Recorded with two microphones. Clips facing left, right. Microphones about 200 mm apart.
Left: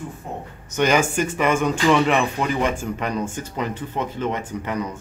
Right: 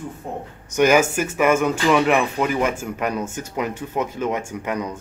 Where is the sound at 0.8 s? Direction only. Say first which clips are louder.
Right 3 dB; 5° right (ahead or behind).